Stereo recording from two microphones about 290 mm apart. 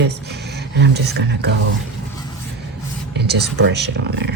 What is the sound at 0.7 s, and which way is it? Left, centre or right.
Speech, right.